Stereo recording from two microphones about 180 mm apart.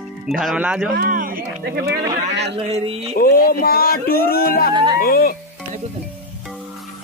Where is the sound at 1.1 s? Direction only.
50° right (ahead or behind).